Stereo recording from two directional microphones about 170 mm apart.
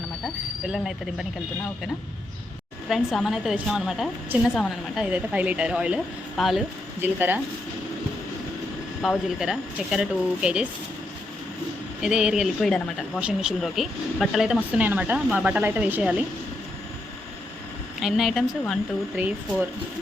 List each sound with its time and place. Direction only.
2.9 s speech: centre (ahead or behind)
9.0 s speech: centre (ahead or behind)
12.0 s speech: 5° right (ahead or behind)
18.0 s speech: centre (ahead or behind)